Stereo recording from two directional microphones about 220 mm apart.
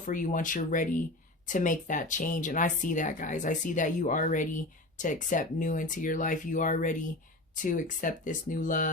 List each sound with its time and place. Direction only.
0.0 s speech: 35° left (ahead or behind)